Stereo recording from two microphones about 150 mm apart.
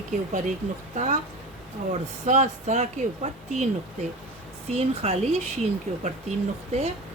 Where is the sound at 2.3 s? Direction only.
50° right (ahead or behind).